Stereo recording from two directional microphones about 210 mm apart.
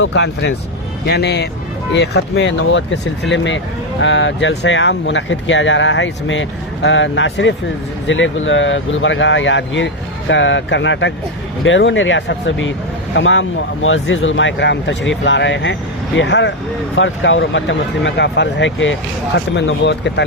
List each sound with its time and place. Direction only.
0.0 s a man's voice: 60° left (ahead or behind)